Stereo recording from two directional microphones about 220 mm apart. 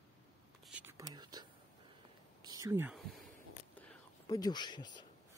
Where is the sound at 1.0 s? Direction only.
15° right (ahead or behind).